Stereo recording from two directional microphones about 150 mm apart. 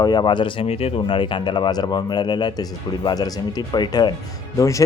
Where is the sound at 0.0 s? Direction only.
30° left (ahead or behind).